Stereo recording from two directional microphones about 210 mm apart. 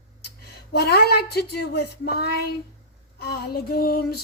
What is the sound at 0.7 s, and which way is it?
A woman's voice, 50° left (ahead or behind).